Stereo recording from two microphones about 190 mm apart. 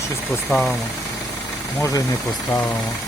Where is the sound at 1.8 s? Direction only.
15° left (ahead or behind).